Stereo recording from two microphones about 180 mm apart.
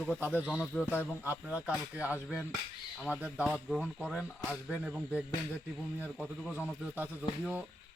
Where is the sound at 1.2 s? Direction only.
10° right (ahead or behind).